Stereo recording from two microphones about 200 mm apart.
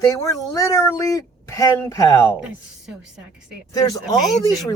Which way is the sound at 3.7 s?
20° left (ahead or behind).